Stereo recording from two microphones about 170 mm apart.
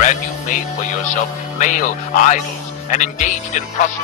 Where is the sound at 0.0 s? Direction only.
45° left (ahead or behind).